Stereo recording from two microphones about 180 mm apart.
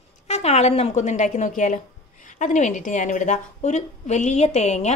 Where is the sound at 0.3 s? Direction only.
35° left (ahead or behind).